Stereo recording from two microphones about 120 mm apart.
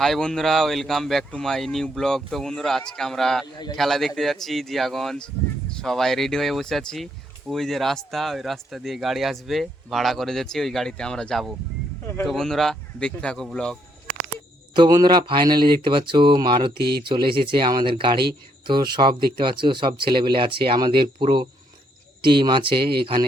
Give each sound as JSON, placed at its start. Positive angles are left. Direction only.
{"t": 0.0, "sound": "speech", "side_deg": 5}
{"t": 3.4, "sound": "a man's voice", "side_deg": 35}
{"t": 3.8, "sound": "speech", "side_deg": 0}
{"t": 14.8, "sound": "speech", "side_deg": -35}